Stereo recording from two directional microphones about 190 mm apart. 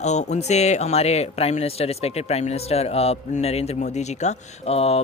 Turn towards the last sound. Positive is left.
turn(degrees=35)  # may be behind; listen again after turning